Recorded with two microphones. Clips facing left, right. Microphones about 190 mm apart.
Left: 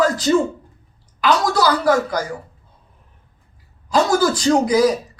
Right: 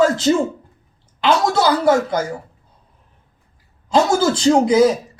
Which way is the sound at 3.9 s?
25° right (ahead or behind).